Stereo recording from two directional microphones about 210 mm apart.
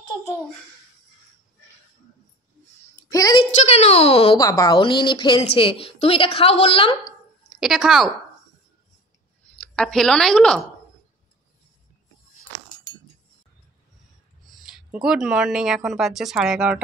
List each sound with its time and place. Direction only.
3.0 s a sound: 15° left (ahead or behind)
3.5 s a child's voice: 30° left (ahead or behind)
4.4 s a woman's voice: 15° left (ahead or behind)
7.6 s speech: centre (ahead or behind)
9.8 s speech: 5° left (ahead or behind)
14.6 s speech: 5° right (ahead or behind)